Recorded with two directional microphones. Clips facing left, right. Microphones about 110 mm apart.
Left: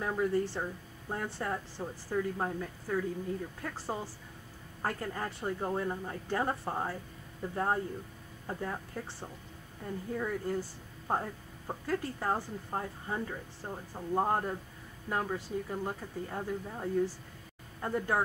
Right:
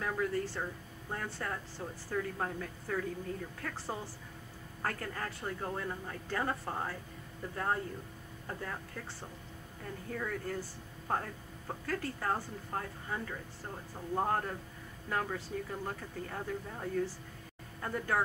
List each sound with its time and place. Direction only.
0.0 s speech: 20° left (ahead or behind)
10.1 s speech: 15° left (ahead or behind)